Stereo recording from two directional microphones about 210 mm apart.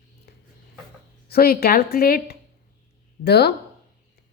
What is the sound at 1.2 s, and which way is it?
A woman's voice, 45° left (ahead or behind).